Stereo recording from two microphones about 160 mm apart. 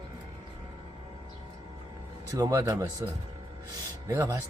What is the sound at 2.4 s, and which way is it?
Speech, 20° right (ahead or behind).